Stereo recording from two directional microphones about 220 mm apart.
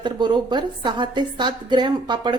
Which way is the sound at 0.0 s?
20° right (ahead or behind).